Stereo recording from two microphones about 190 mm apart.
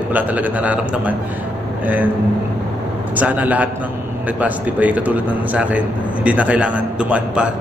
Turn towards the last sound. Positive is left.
turn(degrees=-5)  # may be behind; listen again after turning